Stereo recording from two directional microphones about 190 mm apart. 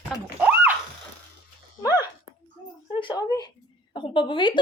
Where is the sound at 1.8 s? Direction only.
20° left (ahead or behind).